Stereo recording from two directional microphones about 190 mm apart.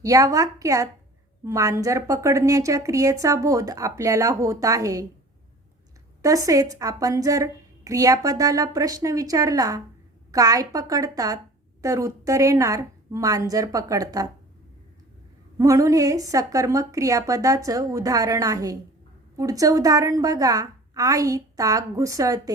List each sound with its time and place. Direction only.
0.0 s a woman's voice: 15° right (ahead or behind)
6.2 s a woman's voice: 15° right (ahead or behind)
15.5 s a woman's voice: 15° right (ahead or behind)